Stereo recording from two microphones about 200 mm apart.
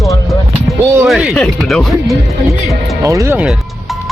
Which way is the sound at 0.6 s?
15° right (ahead or behind).